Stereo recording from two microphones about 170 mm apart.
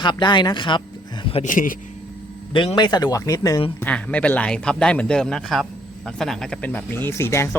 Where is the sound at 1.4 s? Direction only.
55° left (ahead or behind).